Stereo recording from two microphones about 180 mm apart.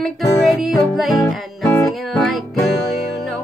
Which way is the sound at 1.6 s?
15° left (ahead or behind).